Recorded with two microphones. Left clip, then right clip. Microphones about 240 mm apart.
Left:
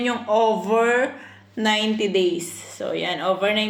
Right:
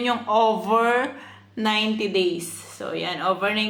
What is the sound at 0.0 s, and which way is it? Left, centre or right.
Speech, centre.